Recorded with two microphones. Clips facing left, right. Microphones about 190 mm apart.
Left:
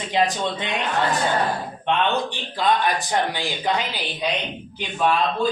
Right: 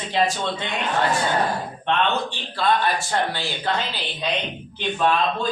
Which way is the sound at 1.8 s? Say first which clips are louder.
Left 1 dB; 15° left (ahead or behind).